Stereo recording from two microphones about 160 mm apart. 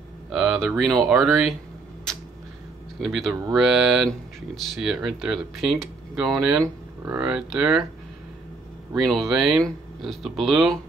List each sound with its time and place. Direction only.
0.3 s speech: centre (ahead or behind)
3.0 s speech: centre (ahead or behind)
8.9 s speech: centre (ahead or behind)